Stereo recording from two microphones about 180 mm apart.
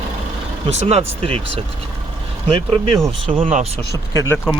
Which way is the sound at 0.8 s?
35° right (ahead or behind).